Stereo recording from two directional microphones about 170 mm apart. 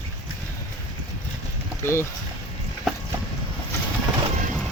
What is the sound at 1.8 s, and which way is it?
Speech, 15° left (ahead or behind).